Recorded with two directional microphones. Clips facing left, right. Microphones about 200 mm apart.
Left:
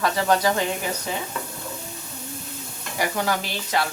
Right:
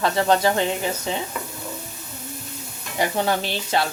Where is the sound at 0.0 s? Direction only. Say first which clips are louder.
Right 2 dB; 25° right (ahead or behind).